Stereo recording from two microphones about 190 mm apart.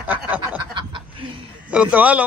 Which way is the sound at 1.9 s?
10° right (ahead or behind).